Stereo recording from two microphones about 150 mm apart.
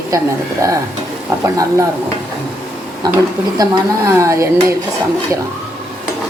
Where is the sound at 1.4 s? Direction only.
20° right (ahead or behind).